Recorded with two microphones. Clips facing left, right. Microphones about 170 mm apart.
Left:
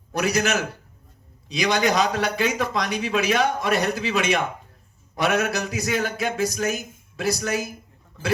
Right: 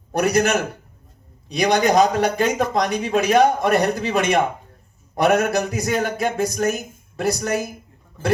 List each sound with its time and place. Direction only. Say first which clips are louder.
0.1 s a man's voice: right 4 dB; 55° right (ahead or behind)